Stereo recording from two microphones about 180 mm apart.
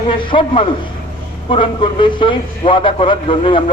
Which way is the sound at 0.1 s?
30° left (ahead or behind).